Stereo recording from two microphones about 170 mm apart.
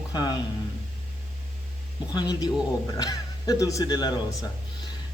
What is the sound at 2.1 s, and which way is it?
Speech, 25° left (ahead or behind).